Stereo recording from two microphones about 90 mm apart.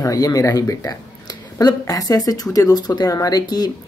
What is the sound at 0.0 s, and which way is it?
Speech, 40° left (ahead or behind).